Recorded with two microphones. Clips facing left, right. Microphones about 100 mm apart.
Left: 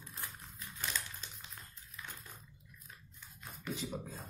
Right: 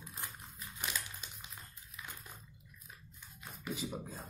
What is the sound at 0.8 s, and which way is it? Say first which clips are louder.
Crushing: even; 10° right (ahead or behind).